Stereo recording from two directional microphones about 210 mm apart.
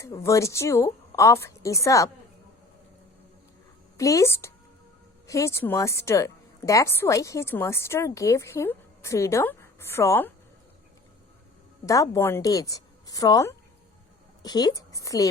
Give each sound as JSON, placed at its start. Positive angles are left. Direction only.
{"t": 0.0, "sound": "a woman's voice", "side_deg": 15}
{"t": 3.9, "sound": "a woman's voice", "side_deg": 15}
{"t": 11.9, "sound": "a woman's voice", "side_deg": 15}